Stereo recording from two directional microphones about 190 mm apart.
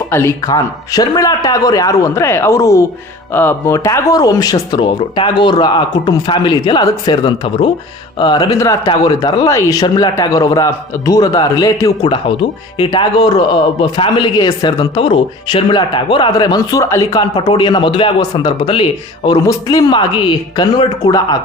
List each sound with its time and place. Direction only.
0.1 s a man's voice: 15° left (ahead or behind)